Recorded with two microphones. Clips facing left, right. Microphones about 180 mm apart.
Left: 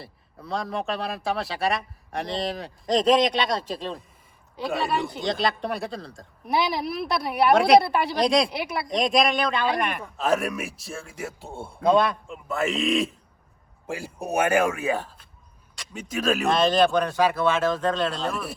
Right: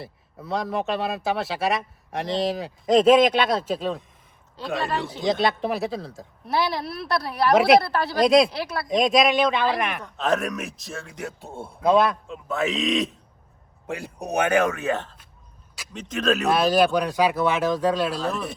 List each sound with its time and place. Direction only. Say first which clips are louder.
0.0 s speech: right 3 dB; centre (ahead or behind)
6.4 s a woman's voice: even; 15° left (ahead or behind)
7.5 s speech: right 1 dB; 5° right (ahead or behind)
7.8 s a woman's voice: left 2 dB; 20° left (ahead or behind)
8.1 s speech: right 6 dB; centre (ahead or behind)
8.5 s a woman's voice: even; 20° left (ahead or behind)
8.9 s a woman's voice: right 3 dB; centre (ahead or behind)
16.5 s speech: even; 5° right (ahead or behind)